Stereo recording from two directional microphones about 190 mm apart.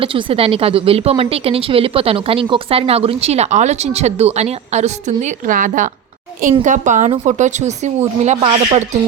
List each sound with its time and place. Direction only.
0.0 s a woman's voice: 25° right (ahead or behind)